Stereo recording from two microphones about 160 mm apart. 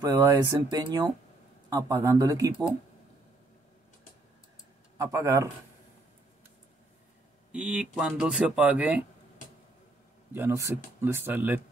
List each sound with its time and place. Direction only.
0.0 s speech: 20° right (ahead or behind)
4.9 s speech: 20° right (ahead or behind)
7.5 s speech: 5° right (ahead or behind)
10.3 s speech: 15° right (ahead or behind)